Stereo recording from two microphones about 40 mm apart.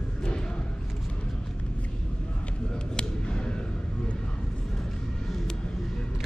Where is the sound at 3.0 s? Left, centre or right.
Left.